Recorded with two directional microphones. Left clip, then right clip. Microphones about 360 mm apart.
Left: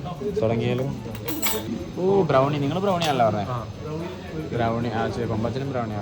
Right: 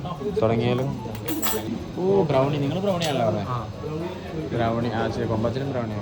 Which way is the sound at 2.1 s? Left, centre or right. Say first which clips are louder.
Left 1 dB; centre.